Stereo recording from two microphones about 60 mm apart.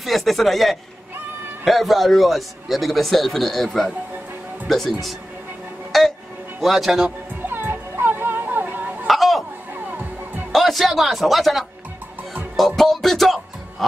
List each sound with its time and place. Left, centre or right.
0.0 s a man's voice: centre
5.9 s music: centre
6.6 s a man's voice: centre
7.4 s music: right
9.0 s a sound: centre
10.5 s speech: centre
12.5 s music: centre